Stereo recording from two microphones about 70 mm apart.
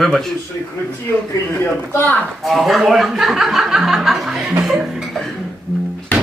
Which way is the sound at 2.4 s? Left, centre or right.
Centre.